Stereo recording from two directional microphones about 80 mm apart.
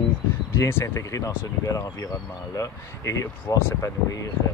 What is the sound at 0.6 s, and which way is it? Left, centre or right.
Speech, left.